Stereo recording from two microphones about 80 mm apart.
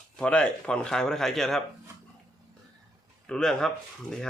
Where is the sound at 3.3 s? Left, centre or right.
Centre.